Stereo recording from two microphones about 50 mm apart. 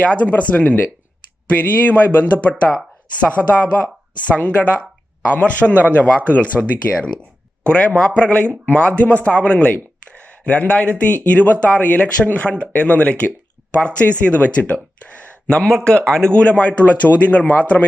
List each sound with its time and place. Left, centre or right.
0.0 s a man's voice: left